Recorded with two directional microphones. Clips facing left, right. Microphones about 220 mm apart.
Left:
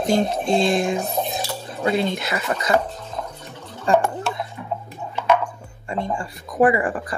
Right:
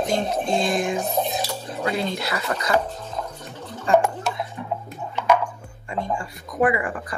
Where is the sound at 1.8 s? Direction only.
20° left (ahead or behind).